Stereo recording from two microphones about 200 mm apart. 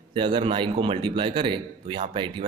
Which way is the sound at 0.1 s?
25° right (ahead or behind).